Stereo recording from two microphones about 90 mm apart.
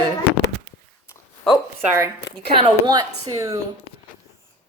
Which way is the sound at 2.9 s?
40° right (ahead or behind).